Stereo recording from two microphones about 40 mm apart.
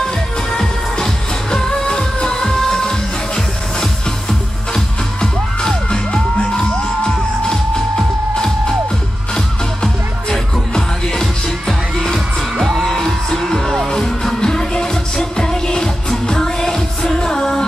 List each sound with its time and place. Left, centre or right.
0.0 s music: centre
4.3 s music: centre
10.3 s music: centre
12.5 s music: centre
12.9 s music: centre